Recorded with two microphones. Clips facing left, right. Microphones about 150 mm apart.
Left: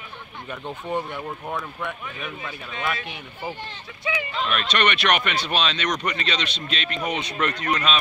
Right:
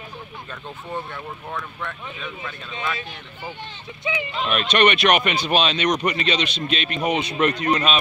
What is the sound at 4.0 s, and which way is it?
Speech, 20° right (ahead or behind).